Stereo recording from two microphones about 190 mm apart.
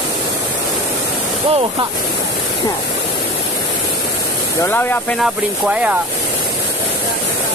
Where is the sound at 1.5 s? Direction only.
30° right (ahead or behind).